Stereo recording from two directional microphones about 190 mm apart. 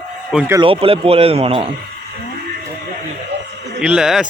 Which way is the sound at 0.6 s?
30° right (ahead or behind).